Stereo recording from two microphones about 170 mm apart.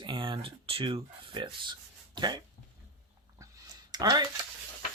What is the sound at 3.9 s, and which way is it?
Speech, 25° right (ahead or behind).